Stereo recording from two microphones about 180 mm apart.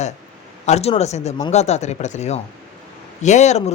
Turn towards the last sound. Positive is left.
turn(degrees=40)  # may be behind; listen again after turning